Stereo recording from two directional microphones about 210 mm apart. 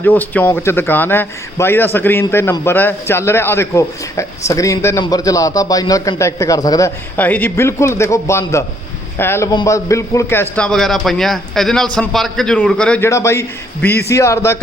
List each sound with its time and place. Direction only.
0.0 s a man's voice: 10° left (ahead or behind)